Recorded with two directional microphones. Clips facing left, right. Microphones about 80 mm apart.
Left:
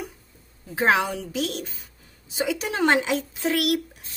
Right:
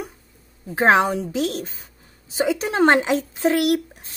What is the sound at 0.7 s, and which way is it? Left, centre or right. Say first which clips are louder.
Speech: right 5 dB; right.